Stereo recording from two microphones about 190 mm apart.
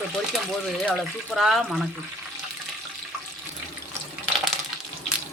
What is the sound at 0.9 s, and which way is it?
Speech, centre (ahead or behind).